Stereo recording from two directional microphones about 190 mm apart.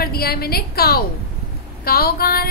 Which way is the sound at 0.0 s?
55° left (ahead or behind).